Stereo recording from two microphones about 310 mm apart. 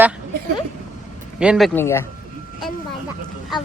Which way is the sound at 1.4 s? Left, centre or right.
Centre.